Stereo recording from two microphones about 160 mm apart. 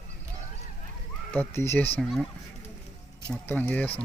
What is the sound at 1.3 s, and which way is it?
Speech, 10° left (ahead or behind).